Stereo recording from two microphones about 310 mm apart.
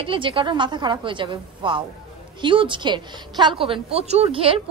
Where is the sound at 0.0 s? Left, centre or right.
Centre.